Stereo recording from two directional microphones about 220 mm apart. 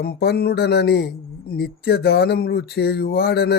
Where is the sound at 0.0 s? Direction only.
45° left (ahead or behind).